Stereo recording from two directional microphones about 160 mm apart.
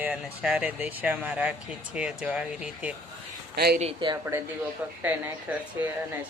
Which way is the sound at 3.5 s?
85° right.